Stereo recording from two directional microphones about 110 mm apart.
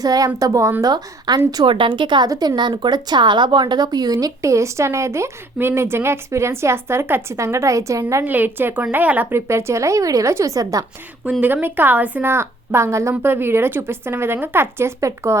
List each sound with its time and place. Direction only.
0.0 s a woman's voice: 35° right (ahead or behind)
1.6 s a woman's voice: 50° right (ahead or behind)
2.3 s a woman's voice: 30° right (ahead or behind)
2.6 s speech: 45° right (ahead or behind); by 8.2 s 30° right (ahead or behind)
8.2 s speech: 15° right (ahead or behind); by 10.8 s 30° right (ahead or behind)
11.3 s speech: 15° right (ahead or behind)